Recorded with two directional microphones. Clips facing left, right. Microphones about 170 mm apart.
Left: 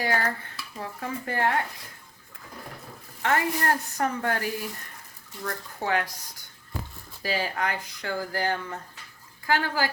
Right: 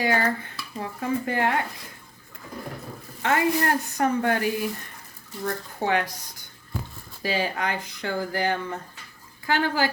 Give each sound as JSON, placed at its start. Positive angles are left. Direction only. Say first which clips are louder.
{"t": 0.0, "sound": "speech", "louder": "right 4 dB", "side_deg": -20}
{"t": 3.2, "sound": "speech", "louder": "right 3 dB", "side_deg": -20}